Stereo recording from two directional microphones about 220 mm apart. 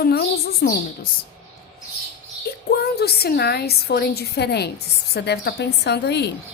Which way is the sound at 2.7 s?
45° left (ahead or behind).